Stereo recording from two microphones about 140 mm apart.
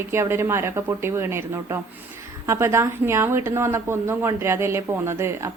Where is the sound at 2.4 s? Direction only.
20° right (ahead or behind).